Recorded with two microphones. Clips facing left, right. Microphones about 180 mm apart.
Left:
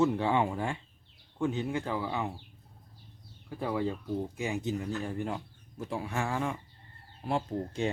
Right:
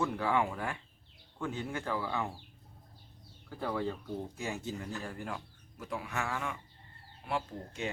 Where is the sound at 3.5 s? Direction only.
15° left (ahead or behind).